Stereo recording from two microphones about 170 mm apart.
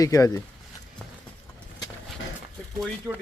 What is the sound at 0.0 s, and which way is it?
Speech, 20° left (ahead or behind).